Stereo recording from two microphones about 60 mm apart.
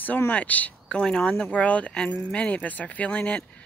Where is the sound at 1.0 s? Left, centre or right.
Centre.